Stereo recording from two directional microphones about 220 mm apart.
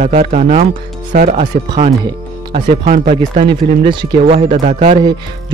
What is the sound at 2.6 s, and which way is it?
Speech, 40° right (ahead or behind).